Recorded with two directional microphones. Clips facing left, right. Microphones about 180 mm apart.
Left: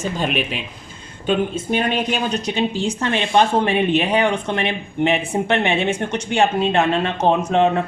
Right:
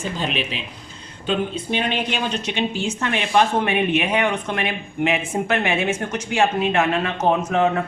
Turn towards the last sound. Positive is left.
turn(degrees=30)  # may be behind; listen again after turning